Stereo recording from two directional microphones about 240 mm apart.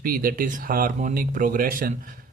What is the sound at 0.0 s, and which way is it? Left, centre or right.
Speech, right.